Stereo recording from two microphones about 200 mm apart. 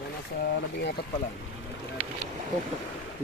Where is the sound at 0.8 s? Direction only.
55° left (ahead or behind).